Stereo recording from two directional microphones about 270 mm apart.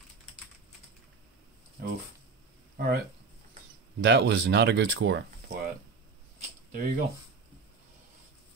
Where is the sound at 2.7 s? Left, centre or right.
Right.